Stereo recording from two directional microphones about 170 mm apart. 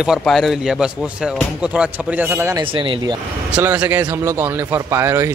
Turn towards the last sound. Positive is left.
turn(degrees=-15)  # may be behind; listen again after turning